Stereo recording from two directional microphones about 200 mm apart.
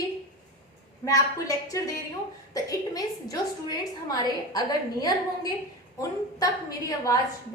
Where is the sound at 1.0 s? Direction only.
15° left (ahead or behind).